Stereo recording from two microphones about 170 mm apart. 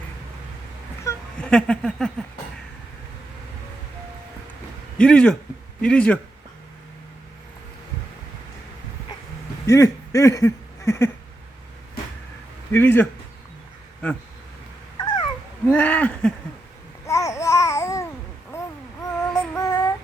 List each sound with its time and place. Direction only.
1.1 s a sound: 15° left (ahead or behind)
1.4 s a sound: 5° left (ahead or behind)
4.9 s speech: 5° left (ahead or behind)
9.6 s speech: 20° left (ahead or behind)
12.7 s speech: 10° left (ahead or behind)
14.9 s cat: 25° left (ahead or behind)
15.6 s speech: 10° left (ahead or behind)
17.1 s babbling: 20° left (ahead or behind)
19.3 s child singing: 15° left (ahead or behind)